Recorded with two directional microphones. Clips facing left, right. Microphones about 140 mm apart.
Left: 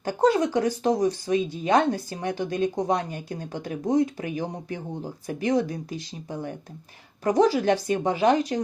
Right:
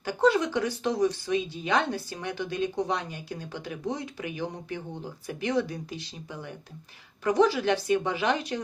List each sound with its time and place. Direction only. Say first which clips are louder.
0.0 s speech: left 2 dB; 45° left (ahead or behind)